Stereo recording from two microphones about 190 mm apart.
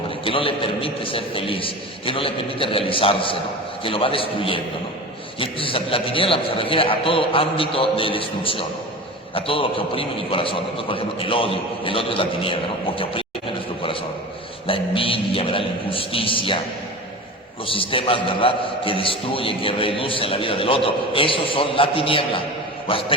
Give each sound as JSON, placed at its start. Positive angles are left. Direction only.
{"t": 0.3, "sound": "a man's voice", "side_deg": 30}
{"t": 14.7, "sound": "a man's voice", "side_deg": 30}
{"t": 17.7, "sound": "a man's voice", "side_deg": 30}